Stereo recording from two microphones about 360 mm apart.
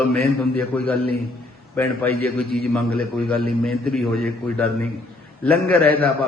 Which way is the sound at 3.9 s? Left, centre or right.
Centre.